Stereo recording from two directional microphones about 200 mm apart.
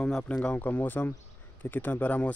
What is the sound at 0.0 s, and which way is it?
Speech, 5° left (ahead or behind).